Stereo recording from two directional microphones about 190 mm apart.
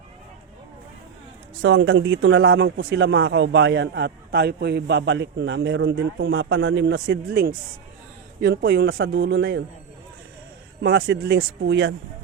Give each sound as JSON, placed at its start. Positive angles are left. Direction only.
{"t": 1.6, "sound": "a man's voice", "side_deg": -90}
{"t": 8.4, "sound": "a man's voice", "side_deg": -60}
{"t": 10.8, "sound": "speech", "side_deg": -90}
{"t": 11.3, "sound": "a man's voice", "side_deg": -65}